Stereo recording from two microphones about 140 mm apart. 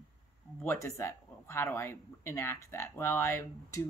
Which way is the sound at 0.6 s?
20° left (ahead or behind).